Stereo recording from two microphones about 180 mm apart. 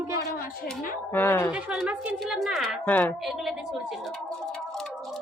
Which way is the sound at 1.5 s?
5° right (ahead or behind).